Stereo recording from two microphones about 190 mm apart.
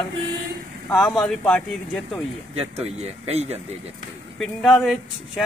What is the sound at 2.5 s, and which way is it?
Speech, 30° right (ahead or behind).